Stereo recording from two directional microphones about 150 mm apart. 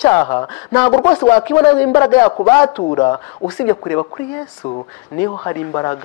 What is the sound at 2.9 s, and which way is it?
Speech, 30° left (ahead or behind).